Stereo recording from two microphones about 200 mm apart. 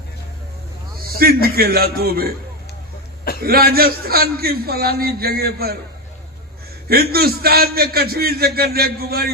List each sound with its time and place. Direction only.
1.0 s a man's voice: 50° right (ahead or behind)
3.4 s a man's voice: 50° right (ahead or behind)
6.8 s a man's voice: 50° right (ahead or behind)